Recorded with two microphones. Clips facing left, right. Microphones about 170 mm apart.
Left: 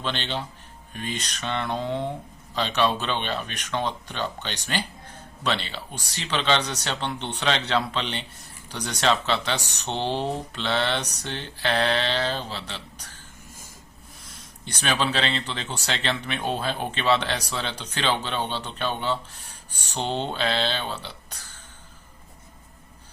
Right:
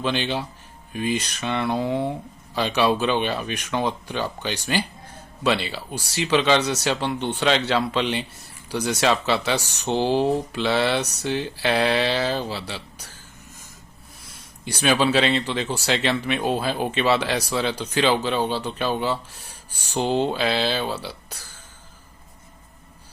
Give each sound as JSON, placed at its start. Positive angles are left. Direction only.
{"t": 0.0, "sound": "speech", "side_deg": -10}
{"t": 14.6, "sound": "speech", "side_deg": -10}